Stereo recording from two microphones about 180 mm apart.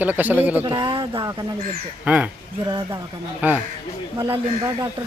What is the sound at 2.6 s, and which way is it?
Speech, 25° right (ahead or behind).